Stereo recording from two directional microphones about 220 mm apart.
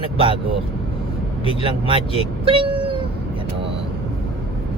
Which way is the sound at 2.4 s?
25° right (ahead or behind).